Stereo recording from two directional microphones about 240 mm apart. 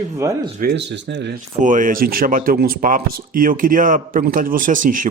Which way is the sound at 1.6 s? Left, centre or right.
Right.